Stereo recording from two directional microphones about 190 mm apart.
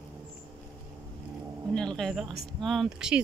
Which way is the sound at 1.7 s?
5° left (ahead or behind).